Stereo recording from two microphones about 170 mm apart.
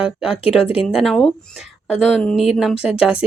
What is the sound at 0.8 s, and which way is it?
A woman's voice, centre (ahead or behind).